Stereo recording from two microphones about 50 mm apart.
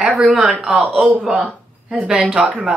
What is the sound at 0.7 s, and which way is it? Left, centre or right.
Speech, right.